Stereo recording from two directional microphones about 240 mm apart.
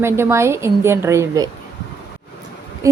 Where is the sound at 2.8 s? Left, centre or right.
Centre.